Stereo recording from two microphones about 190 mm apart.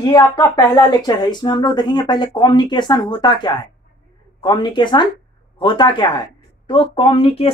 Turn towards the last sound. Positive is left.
turn(degrees=30)  # may be behind; listen again after turning